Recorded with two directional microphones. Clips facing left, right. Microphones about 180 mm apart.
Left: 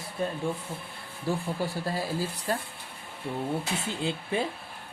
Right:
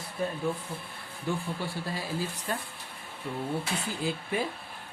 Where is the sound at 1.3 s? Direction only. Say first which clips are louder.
Left 3 dB; 40° left (ahead or behind).